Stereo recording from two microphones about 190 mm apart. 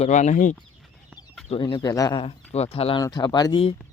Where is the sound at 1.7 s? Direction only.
20° left (ahead or behind).